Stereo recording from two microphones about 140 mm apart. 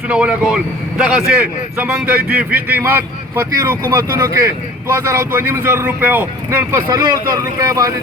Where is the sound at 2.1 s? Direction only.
90° right.